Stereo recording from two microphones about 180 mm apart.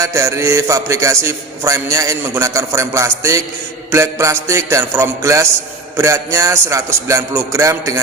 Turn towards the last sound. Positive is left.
turn(degrees=-15)  # may be behind; listen again after turning